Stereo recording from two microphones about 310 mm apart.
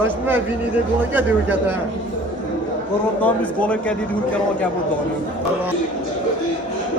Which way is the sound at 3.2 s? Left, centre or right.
Centre.